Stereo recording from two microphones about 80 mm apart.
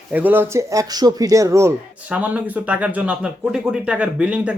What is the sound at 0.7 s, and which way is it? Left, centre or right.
Speech, right.